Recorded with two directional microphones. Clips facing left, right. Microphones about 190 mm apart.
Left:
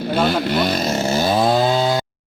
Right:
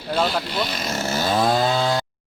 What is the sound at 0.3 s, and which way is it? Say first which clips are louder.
Speech: left 7 dB; 60° left (ahead or behind).